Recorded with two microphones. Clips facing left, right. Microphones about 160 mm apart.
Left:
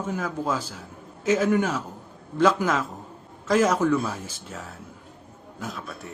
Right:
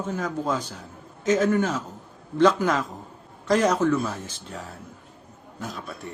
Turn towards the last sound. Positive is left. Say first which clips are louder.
# even
turn(degrees=0)  # may be behind; listen again after turning